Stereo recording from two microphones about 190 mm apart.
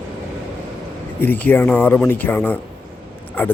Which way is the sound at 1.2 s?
10° left (ahead or behind).